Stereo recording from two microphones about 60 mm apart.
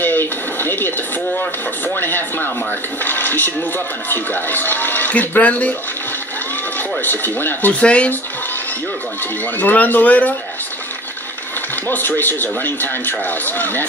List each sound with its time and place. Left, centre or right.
0.0 s television: left
2.0 s speech: left
7.0 s speech: left
7.8 s speech: centre
9.6 s speech: left
11.9 s speech: left